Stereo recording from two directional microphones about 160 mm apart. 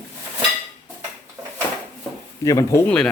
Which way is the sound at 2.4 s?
20° left (ahead or behind).